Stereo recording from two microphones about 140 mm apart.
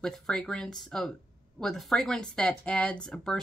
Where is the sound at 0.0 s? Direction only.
5° left (ahead or behind).